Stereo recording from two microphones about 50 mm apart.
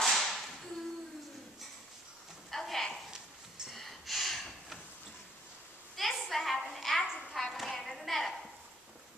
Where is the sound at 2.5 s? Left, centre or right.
Centre.